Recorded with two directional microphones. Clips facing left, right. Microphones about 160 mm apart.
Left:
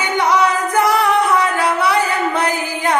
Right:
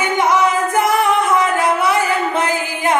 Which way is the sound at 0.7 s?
20° right (ahead or behind).